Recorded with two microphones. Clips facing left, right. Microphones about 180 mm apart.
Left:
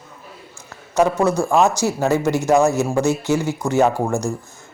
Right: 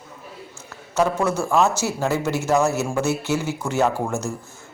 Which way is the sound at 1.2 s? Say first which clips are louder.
Left 3 dB; 10° left (ahead or behind).